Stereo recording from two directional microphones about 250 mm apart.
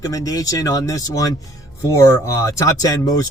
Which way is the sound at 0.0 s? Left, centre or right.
Centre.